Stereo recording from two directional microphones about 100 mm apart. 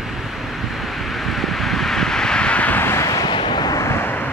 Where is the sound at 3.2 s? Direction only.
55° left (ahead or behind).